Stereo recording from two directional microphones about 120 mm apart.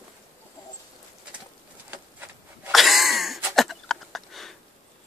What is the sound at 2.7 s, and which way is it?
Throat clearing, centre (ahead or behind).